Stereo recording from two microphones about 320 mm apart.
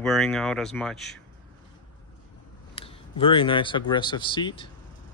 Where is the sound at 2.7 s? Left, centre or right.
Centre.